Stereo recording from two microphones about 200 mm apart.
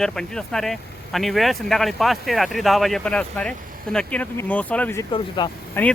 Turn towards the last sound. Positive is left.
turn(degrees=10)  # may be behind; listen again after turning